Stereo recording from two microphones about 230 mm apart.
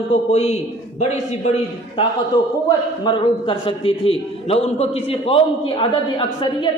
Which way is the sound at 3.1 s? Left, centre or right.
Left.